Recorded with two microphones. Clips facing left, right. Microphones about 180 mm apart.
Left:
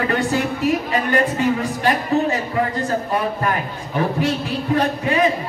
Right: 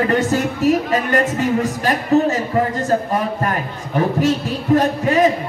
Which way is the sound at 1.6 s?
45° right (ahead or behind).